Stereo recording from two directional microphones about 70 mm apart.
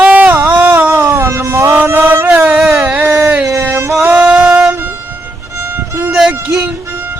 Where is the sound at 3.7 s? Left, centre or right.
Right.